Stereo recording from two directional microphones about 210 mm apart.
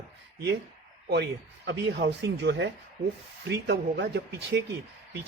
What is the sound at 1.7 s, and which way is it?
Speech, 55° right (ahead or behind).